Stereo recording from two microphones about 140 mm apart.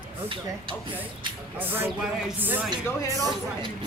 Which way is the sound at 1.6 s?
15° right (ahead or behind).